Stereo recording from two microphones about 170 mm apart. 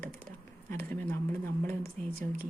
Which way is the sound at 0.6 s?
10° left (ahead or behind).